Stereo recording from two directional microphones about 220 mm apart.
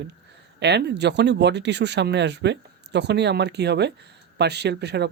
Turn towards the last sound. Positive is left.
turn(degrees=-50)  # may be behind; listen again after turning